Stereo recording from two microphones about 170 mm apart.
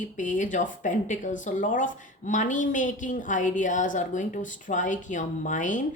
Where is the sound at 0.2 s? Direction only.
50° left (ahead or behind).